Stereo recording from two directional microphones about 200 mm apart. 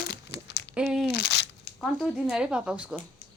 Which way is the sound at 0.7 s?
5° right (ahead or behind).